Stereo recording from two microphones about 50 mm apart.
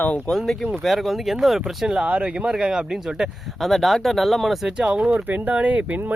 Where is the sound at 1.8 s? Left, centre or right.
Centre.